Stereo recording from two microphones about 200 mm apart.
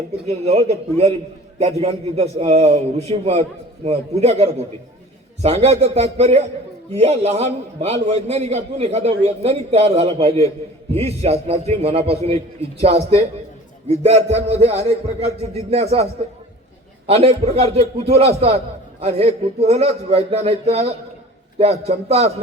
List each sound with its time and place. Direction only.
0.3 s a man's voice: 30° right (ahead or behind)
17.1 s a man's voice: 30° right (ahead or behind)